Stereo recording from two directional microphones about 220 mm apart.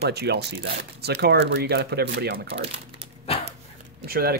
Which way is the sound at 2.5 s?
25° right (ahead or behind).